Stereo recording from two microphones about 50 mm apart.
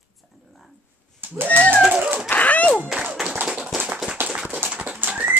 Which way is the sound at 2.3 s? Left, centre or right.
Left.